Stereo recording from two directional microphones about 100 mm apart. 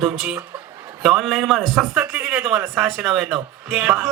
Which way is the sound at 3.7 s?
10° right (ahead or behind).